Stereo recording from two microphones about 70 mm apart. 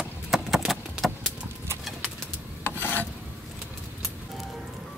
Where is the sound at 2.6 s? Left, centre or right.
Left.